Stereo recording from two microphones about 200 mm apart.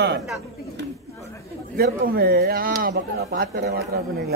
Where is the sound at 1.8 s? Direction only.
50° right (ahead or behind).